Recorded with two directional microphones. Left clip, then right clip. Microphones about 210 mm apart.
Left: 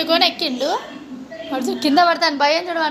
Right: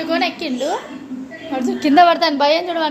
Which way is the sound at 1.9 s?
25° right (ahead or behind).